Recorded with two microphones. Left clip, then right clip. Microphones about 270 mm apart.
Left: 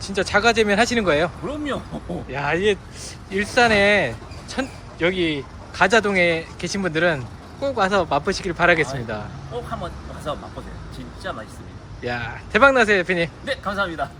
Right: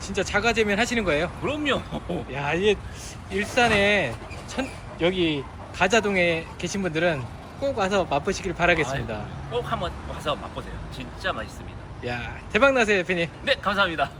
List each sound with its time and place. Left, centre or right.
0.0 s speech: centre
12.0 s speech: centre